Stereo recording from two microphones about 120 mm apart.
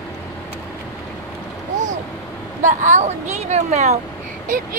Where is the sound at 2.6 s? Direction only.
90° right.